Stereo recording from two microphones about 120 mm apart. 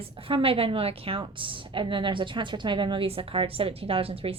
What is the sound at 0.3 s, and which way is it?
A woman's voice, 50° right (ahead or behind).